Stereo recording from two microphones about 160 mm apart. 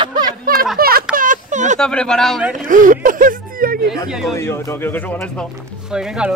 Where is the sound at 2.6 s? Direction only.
55° right (ahead or behind).